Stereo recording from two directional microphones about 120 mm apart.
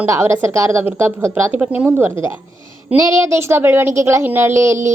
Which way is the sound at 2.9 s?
25° right (ahead or behind).